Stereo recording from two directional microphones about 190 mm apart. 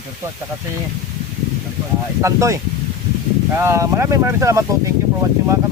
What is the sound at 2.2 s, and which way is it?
Speech, 15° right (ahead or behind).